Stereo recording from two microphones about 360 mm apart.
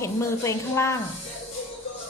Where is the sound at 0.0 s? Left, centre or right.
Centre.